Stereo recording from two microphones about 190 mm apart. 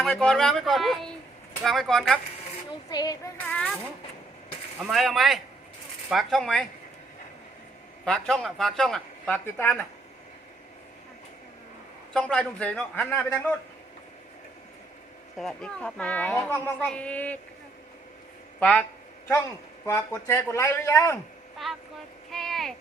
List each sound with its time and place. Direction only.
0.0 s speech: centre (ahead or behind)
2.9 s child singing: 20° left (ahead or behind)
3.4 s speech: 5° left (ahead or behind)
4.9 s speech: centre (ahead or behind)
8.0 s speech: 5° left (ahead or behind)
12.1 s speech: 5° left (ahead or behind)
15.4 s speech: 5° left (ahead or behind)
18.6 s speech: 5° left (ahead or behind)
21.7 s speech: centre (ahead or behind)